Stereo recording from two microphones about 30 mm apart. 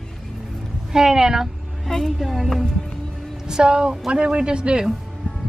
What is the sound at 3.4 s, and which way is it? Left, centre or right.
A man's voice, right.